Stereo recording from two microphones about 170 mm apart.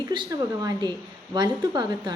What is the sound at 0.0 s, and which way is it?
A woman's voice, 25° right (ahead or behind).